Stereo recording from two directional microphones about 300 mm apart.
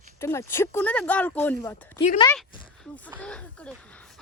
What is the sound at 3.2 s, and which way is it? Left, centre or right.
Speech, centre.